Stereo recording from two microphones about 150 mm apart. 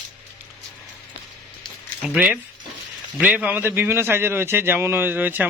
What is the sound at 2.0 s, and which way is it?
A man's voice, 5° right (ahead or behind).